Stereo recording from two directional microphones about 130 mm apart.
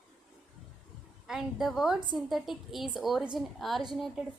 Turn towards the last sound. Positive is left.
turn(degrees=0)  # may be behind; listen again after turning